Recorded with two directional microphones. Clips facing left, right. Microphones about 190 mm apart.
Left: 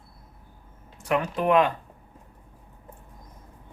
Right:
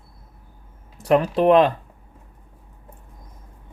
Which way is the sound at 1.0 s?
35° right (ahead or behind).